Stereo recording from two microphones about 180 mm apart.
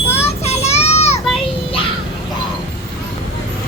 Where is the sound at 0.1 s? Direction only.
35° left (ahead or behind).